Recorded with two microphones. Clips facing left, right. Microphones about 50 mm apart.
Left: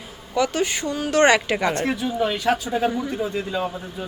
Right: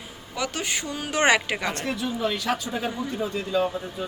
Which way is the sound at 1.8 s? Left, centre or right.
Left.